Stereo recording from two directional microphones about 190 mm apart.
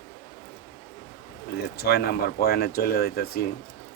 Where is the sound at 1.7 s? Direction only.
55° left (ahead or behind).